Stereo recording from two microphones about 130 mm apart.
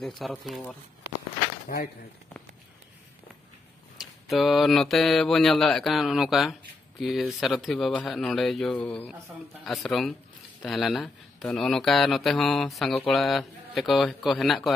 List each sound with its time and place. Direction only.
0.0 s mantra: centre (ahead or behind)
1.7 s speech: 90° left
4.0 s mantra: centre (ahead or behind)